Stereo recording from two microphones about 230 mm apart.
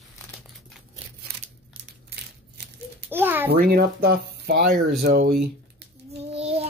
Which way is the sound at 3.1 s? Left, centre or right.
Centre.